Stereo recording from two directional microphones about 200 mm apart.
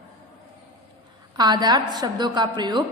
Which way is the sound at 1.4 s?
20° right (ahead or behind).